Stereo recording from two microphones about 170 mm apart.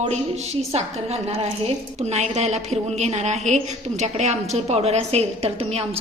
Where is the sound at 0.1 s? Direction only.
40° right (ahead or behind).